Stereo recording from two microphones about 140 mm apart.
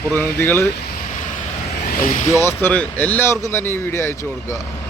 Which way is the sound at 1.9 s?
70° left (ahead or behind).